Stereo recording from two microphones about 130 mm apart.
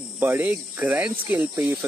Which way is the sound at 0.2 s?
15° right (ahead or behind).